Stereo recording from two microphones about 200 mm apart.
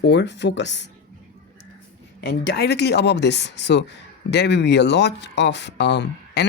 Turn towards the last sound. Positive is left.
turn(degrees=60)  # may be behind; listen again after turning